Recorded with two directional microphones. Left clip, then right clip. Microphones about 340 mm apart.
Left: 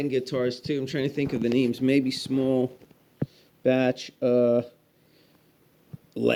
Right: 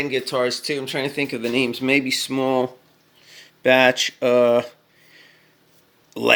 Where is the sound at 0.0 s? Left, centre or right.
Centre.